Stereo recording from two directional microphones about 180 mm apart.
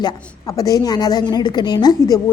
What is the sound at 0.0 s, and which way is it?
A woman's voice, 20° left (ahead or behind).